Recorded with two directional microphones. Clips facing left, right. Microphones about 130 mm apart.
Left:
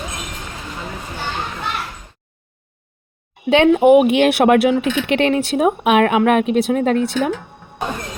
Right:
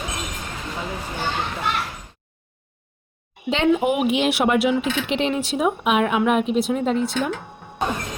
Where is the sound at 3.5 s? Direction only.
60° left (ahead or behind).